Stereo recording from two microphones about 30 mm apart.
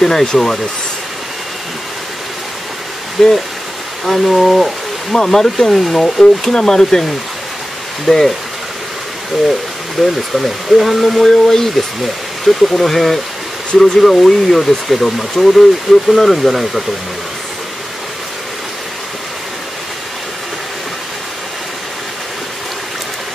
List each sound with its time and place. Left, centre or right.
0.0 s speech: centre
3.2 s speech: centre
5.1 s speech: centre
6.2 s speech: left
8.1 s speech: centre
10.0 s speech: centre
11.2 s speech: centre